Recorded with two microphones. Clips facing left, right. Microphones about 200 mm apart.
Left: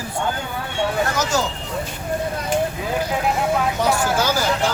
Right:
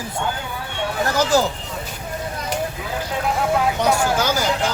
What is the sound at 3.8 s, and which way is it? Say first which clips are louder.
Speech: right 1 dB; 10° left (ahead or behind).